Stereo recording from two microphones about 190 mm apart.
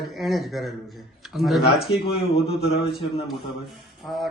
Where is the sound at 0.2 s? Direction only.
Centre (ahead or behind).